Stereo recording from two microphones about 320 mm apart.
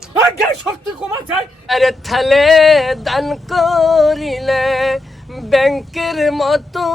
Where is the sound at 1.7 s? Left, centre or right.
Centre.